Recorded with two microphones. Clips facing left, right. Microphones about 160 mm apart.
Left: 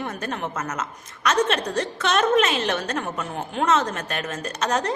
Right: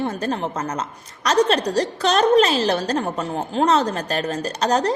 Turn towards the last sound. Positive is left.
turn(degrees=-35)  # may be behind; listen again after turning